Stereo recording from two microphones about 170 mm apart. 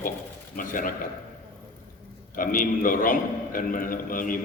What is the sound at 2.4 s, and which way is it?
A man's voice, 55° left (ahead or behind).